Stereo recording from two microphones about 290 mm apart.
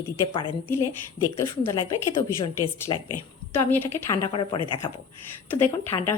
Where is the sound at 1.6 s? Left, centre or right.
Centre.